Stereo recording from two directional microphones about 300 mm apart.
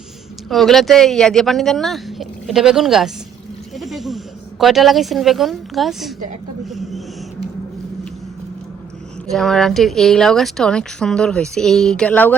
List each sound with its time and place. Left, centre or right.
0.5 s a woman's voice: centre
9.3 s a woman's voice: centre